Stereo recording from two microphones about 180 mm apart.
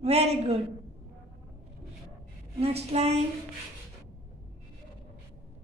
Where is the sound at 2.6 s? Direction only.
35° right (ahead or behind).